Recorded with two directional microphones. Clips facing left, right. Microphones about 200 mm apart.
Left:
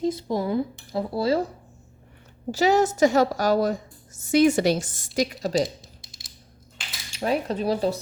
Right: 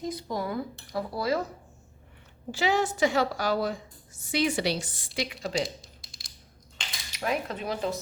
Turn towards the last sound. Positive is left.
turn(degrees=35)  # may be behind; listen again after turning